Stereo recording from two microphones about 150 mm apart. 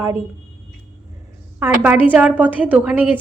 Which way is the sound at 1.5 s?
10° right (ahead or behind).